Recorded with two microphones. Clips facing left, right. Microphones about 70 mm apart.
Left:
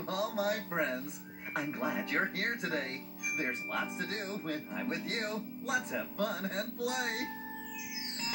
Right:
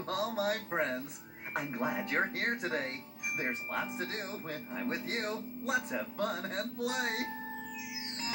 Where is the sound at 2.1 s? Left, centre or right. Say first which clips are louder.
Right 1 dB; right.